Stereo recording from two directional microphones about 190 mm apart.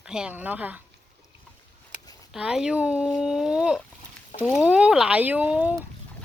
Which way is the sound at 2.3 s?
5° right (ahead or behind).